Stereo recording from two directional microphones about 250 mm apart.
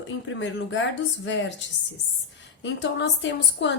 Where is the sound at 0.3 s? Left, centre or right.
Left.